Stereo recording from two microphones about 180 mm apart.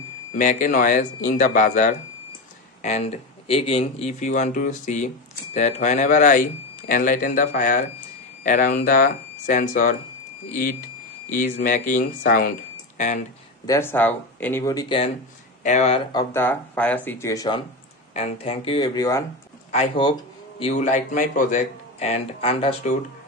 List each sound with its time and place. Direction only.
0.3 s speech: 45° left (ahead or behind)
13.7 s speech: 15° left (ahead or behind)
14.6 s speech: 20° left (ahead or behind)
15.6 s speech: 40° left (ahead or behind)
16.1 s speech: 15° left (ahead or behind)
18.1 s speech: 35° left (ahead or behind)
18.9 s speech: 15° left (ahead or behind)
19.7 s speech: 30° left (ahead or behind)